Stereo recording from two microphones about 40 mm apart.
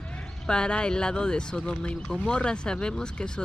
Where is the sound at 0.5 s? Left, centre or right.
Left.